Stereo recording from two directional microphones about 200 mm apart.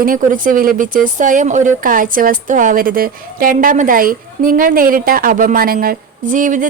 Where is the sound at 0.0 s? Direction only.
45° right (ahead or behind).